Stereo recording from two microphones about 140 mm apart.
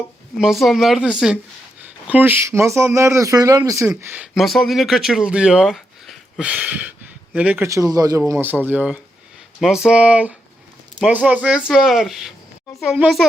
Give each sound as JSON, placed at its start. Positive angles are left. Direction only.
{"t": 0.3, "sound": "speech", "side_deg": 0}
{"t": 4.4, "sound": "speech", "side_deg": 0}
{"t": 7.7, "sound": "speech", "side_deg": -25}
{"t": 8.3, "sound": "speech", "side_deg": -15}